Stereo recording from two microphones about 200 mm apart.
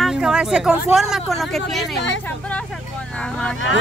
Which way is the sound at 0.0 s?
5° right (ahead or behind).